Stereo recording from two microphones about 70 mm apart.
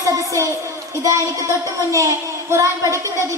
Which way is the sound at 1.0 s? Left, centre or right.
Right.